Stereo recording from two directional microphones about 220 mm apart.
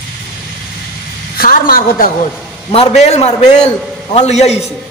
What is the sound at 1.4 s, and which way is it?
Speech, 40° left (ahead or behind).